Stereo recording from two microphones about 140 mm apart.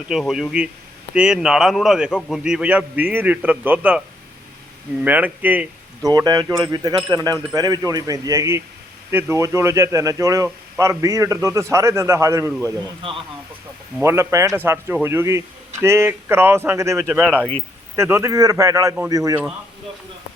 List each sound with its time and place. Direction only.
0.1 s speech: 5° right (ahead or behind)
5.0 s speech: 10° right (ahead or behind)
6.0 s a man's voice: 25° right (ahead or behind)
14.0 s speech: 20° right (ahead or behind)
17.1 s speech: 5° right (ahead or behind)
17.9 s a man's voice: 20° right (ahead or behind)